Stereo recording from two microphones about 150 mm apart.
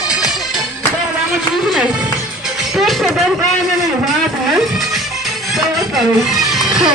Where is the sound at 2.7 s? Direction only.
Centre (ahead or behind).